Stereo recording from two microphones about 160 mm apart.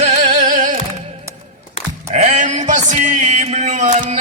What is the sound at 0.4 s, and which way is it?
Music, 55° right (ahead or behind).